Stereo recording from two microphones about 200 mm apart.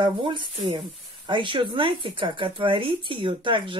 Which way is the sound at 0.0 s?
25° right (ahead or behind).